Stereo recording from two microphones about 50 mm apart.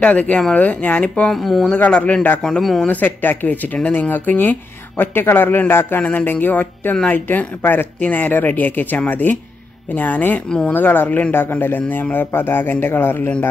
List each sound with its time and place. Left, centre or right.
0.0 s speech: left
1.3 s speech: centre
1.7 s speech: left
2.6 s speech: centre
2.9 s a man's voice: left